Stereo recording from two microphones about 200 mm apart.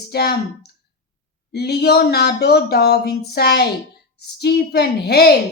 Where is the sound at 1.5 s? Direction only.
55° left (ahead or behind).